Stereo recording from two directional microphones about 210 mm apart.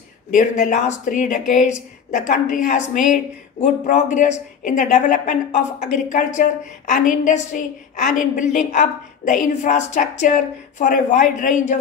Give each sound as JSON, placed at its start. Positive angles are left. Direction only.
{"t": 0.3, "sound": "a woman's voice", "side_deg": 35}